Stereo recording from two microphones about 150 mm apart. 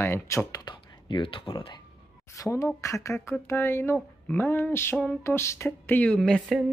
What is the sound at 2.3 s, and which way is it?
Speech, 20° left (ahead or behind).